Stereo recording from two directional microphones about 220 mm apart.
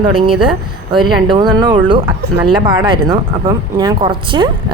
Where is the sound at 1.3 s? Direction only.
20° right (ahead or behind).